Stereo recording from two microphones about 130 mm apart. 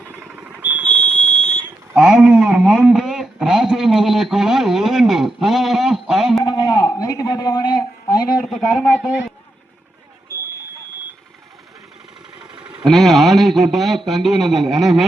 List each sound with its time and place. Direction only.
0.3 s alarm: 10° right (ahead or behind)
0.8 s fire alarm: 10° left (ahead or behind)
1.9 s speech: 5° right (ahead or behind)
6.4 s a sound: 30° left (ahead or behind)
8.4 s a man's voice: centre (ahead or behind)
12.8 s a man's voice: centre (ahead or behind)